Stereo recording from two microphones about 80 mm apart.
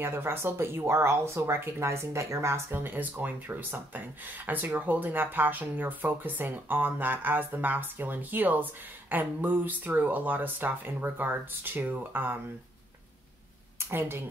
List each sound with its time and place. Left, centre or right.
0.0 s speech: right
13.7 s a woman's voice: right